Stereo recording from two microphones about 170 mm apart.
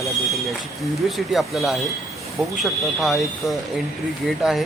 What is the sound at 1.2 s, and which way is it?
Speech, centre (ahead or behind).